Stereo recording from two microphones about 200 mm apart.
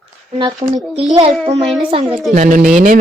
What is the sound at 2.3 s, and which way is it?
Speech, 40° right (ahead or behind).